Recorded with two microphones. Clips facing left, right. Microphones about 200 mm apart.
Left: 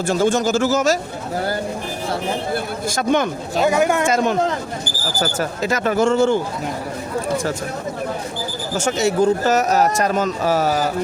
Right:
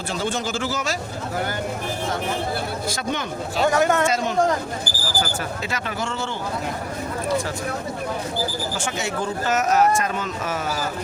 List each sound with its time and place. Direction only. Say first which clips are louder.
0.1 s speech: left 9 dB; 45° left (ahead or behind)
2.9 s speech: left 14 dB; 50° left (ahead or behind)
3.6 s speech: left 2 dB; 10° left (ahead or behind)
4.0 s speech: left 4 dB; 50° left (ahead or behind)
5.2 s speech: left 10 dB; 40° left (ahead or behind)
8.8 s speech: left 13 dB; 40° left (ahead or behind)